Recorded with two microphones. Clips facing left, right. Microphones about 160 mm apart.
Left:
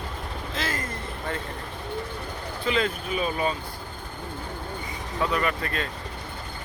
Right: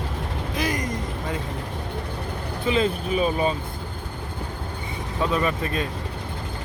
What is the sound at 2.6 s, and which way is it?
Speech, 20° right (ahead or behind).